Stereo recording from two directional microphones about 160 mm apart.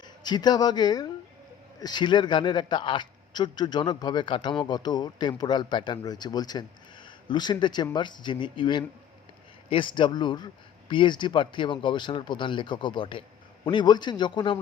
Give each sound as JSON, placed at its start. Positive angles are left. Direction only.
{"t": 0.0, "sound": "a man's voice", "side_deg": 25}